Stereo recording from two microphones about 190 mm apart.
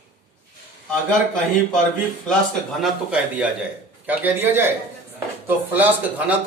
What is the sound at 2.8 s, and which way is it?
A man's voice, 5° right (ahead or behind).